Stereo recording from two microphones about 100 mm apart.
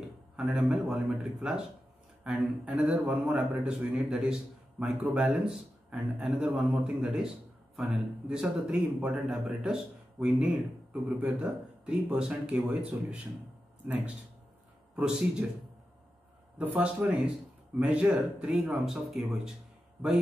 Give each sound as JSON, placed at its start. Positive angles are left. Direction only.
{"t": 0.5, "sound": "speech", "side_deg": -10}
{"t": 3.5, "sound": "speech", "side_deg": -15}
{"t": 4.1, "sound": "speech", "side_deg": -5}
{"t": 16.5, "sound": "speech", "side_deg": -15}
{"t": 18.7, "sound": "speech", "side_deg": 0}